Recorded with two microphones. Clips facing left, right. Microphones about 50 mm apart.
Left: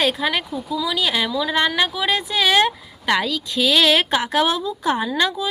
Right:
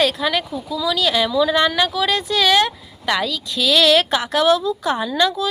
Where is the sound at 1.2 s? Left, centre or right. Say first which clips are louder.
Right 5 dB; centre.